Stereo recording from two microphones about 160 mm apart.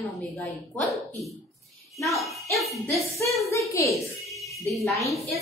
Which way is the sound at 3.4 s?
20° left (ahead or behind).